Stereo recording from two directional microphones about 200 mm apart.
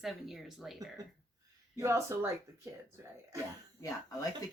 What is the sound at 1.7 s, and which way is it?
Speech, 15° right (ahead or behind).